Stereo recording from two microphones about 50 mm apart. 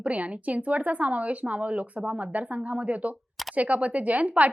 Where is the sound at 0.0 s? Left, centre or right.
Right.